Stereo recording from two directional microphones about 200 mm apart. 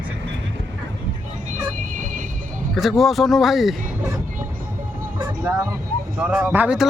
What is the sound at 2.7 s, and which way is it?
Speech, centre (ahead or behind).